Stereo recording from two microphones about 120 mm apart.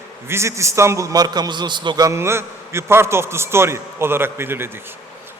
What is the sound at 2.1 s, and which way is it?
A man's voice, 20° right (ahead or behind).